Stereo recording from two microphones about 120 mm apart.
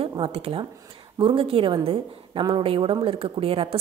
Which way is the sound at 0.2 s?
50° right (ahead or behind).